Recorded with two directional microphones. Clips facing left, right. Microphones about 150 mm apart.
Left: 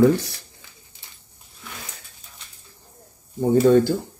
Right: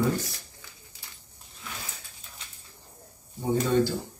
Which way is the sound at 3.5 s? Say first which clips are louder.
Left 8 dB; 50° left (ahead or behind).